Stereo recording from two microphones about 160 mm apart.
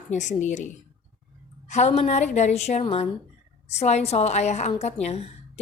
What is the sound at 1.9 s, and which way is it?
A woman's voice, 45° left (ahead or behind).